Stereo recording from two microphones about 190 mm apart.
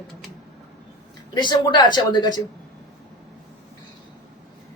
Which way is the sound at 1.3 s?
20° left (ahead or behind).